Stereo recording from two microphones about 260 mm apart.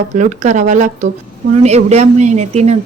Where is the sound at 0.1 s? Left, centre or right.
Right.